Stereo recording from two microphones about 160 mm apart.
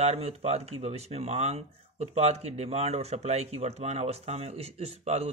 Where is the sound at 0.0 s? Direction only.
40° right (ahead or behind).